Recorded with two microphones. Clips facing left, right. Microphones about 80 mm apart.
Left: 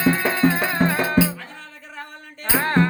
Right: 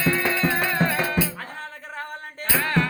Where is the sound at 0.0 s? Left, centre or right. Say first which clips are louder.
Left 4 dB; left.